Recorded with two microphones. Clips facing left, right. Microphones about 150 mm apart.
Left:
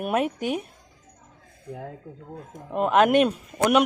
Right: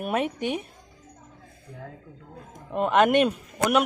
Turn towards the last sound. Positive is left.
turn(degrees=0)  # may be behind; listen again after turning